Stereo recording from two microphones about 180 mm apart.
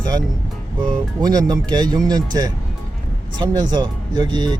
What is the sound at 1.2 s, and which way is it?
Speech, 20° right (ahead or behind).